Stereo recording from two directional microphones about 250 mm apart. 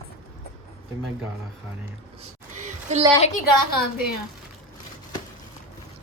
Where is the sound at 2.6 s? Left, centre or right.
Right.